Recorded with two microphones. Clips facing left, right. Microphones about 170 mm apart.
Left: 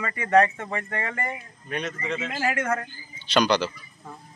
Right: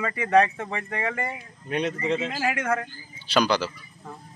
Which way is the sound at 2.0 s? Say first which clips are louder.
Right 5 dB; 30° right (ahead or behind).